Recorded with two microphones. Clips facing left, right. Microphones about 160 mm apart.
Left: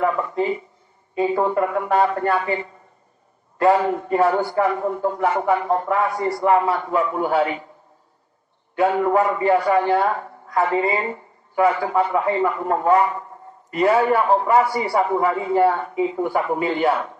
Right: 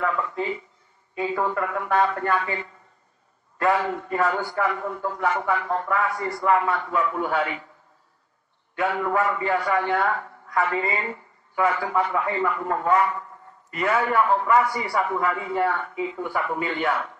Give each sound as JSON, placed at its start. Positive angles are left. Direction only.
{"t": 0.0, "sound": "a man's voice", "side_deg": 25}
{"t": 8.7, "sound": "a man's voice", "side_deg": 20}